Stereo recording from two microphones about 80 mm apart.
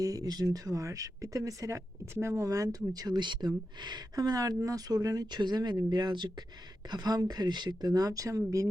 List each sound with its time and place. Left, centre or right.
0.0 s speech: right
6.9 s speech: right